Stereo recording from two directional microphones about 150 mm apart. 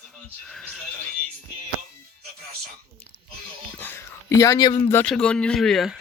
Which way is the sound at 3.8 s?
15° left (ahead or behind).